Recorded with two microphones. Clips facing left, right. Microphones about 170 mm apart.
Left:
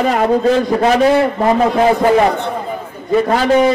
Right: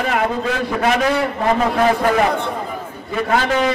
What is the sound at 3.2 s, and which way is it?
Speech, 30° left (ahead or behind).